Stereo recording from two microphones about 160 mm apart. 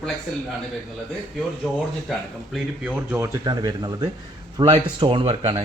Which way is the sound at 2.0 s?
Centre (ahead or behind).